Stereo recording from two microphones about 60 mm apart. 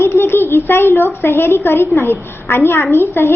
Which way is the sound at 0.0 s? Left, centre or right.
Left.